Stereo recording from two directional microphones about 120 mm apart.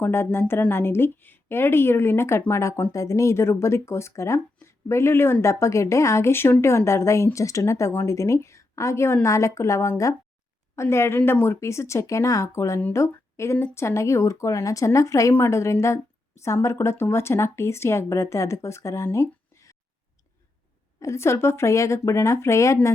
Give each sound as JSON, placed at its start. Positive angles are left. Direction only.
{"t": 0.0, "sound": "a woman's voice", "side_deg": 20}
{"t": 21.0, "sound": "a woman's voice", "side_deg": 25}